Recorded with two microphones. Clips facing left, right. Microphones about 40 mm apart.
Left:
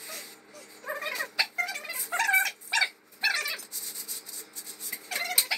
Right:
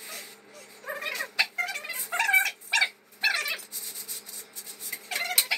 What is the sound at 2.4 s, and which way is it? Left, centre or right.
Dog, right.